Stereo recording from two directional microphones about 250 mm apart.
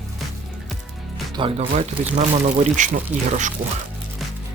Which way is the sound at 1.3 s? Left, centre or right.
Right.